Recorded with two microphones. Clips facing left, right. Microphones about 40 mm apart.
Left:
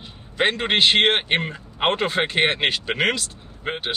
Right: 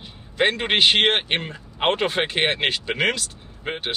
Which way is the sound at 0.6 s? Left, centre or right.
Centre.